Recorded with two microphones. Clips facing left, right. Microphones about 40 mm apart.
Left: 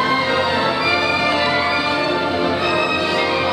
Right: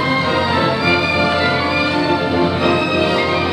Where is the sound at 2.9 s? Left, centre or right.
Centre.